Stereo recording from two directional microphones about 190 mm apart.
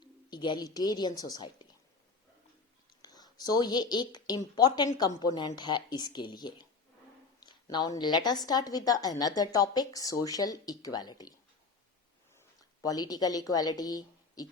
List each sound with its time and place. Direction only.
0.0 s a woman's voice: 20° left (ahead or behind)
3.0 s a woman's voice: 20° left (ahead or behind)
12.8 s a woman's voice: 20° left (ahead or behind)